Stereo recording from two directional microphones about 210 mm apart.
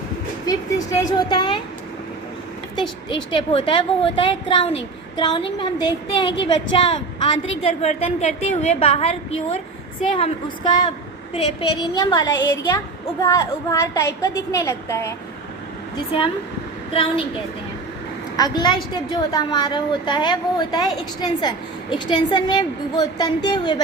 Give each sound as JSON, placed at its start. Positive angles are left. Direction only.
{"t": 0.4, "sound": "speech", "side_deg": 15}
{"t": 3.1, "sound": "a woman's voice", "side_deg": 20}
{"t": 11.9, "sound": "a woman's voice", "side_deg": 20}
{"t": 16.1, "sound": "a woman's voice", "side_deg": 25}
{"t": 18.3, "sound": "a woman's voice", "side_deg": 20}